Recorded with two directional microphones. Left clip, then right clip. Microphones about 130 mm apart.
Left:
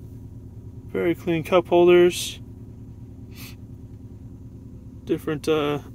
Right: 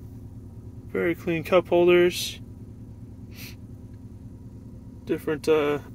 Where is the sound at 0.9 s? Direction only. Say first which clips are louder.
Left 2 dB; 25° left (ahead or behind).